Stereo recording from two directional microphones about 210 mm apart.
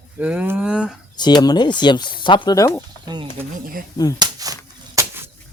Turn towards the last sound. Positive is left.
turn(degrees=-15)  # may be behind; listen again after turning